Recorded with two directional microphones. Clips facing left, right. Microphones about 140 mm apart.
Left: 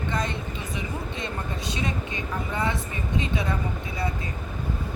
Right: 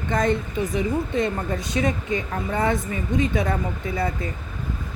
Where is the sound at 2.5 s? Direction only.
50° right (ahead or behind).